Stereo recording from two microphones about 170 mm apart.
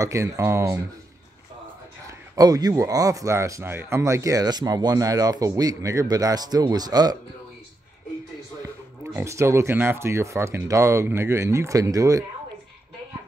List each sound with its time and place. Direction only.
0.0 s speech: 20° right (ahead or behind)
2.0 s a man's voice: 20° right (ahead or behind)
8.6 s speech: 15° right (ahead or behind)